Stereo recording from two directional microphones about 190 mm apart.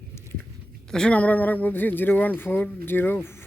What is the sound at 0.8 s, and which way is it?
Speech, 5° left (ahead or behind).